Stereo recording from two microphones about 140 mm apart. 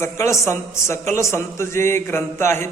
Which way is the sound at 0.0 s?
20° left (ahead or behind).